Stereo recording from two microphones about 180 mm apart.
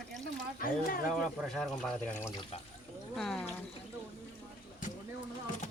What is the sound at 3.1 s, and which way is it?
Speech, 5° left (ahead or behind).